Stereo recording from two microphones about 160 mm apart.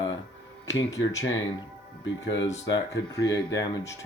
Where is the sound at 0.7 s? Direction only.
20° left (ahead or behind).